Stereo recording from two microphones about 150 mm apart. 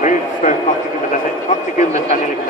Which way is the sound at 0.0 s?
55° left (ahead or behind).